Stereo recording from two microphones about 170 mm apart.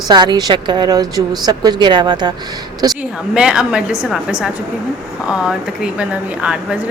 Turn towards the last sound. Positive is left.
turn(degrees=-5)  # may be behind; listen again after turning